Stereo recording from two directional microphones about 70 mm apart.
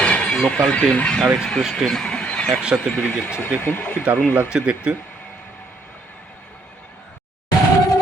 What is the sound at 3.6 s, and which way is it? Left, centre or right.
Speech, left.